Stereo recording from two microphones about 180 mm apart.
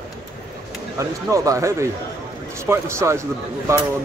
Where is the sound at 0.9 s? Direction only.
20° right (ahead or behind).